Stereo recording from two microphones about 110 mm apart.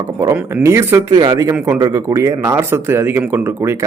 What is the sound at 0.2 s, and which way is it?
A man's voice, 25° right (ahead or behind).